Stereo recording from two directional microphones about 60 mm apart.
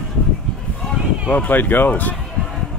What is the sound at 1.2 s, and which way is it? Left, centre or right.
Speech, left.